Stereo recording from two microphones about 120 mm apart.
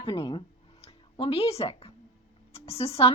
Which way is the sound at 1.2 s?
55° left (ahead or behind).